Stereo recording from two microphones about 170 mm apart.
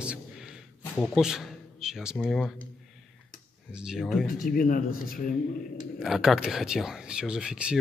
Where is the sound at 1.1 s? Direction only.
Centre (ahead or behind).